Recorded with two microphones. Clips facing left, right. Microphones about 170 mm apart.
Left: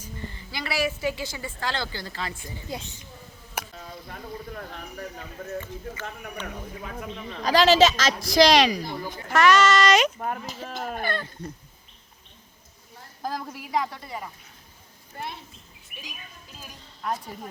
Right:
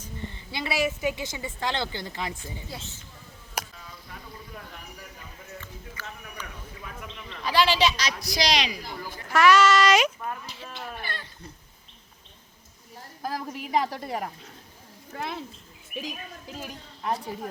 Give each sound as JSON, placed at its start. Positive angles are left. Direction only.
{"t": 0.5, "sound": "a woman's voice", "side_deg": -20}
{"t": 2.4, "sound": "a woman's voice", "side_deg": 15}
{"t": 3.8, "sound": "a sound", "side_deg": 45}
{"t": 6.4, "sound": "a woman's voice", "side_deg": 50}
{"t": 9.3, "sound": "speech", "side_deg": -5}
{"t": 10.2, "sound": "a woman's voice", "side_deg": 45}
{"t": 13.2, "sound": "speech", "side_deg": -10}
{"t": 13.7, "sound": "a woman's voice", "side_deg": -30}
{"t": 15.1, "sound": "speech", "side_deg": -75}